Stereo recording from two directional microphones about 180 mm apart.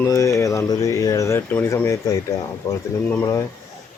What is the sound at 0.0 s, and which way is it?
Speech, 20° left (ahead or behind).